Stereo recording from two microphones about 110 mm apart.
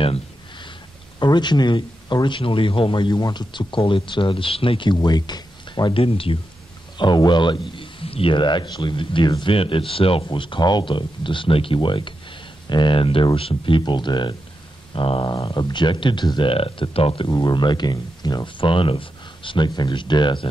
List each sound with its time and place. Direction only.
0.0 s a sound: 60° left (ahead or behind)
1.2 s speech: 40° left (ahead or behind)
4.9 s speech: 40° left (ahead or behind)
5.9 s speech: 55° left (ahead or behind)
7.0 s speech: 45° left (ahead or behind)
17.3 s speech: 40° left (ahead or behind)